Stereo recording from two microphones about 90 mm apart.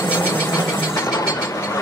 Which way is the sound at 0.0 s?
25° left (ahead or behind).